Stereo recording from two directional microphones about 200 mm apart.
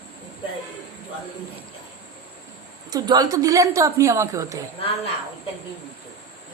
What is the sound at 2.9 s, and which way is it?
A woman's voice, 20° right (ahead or behind).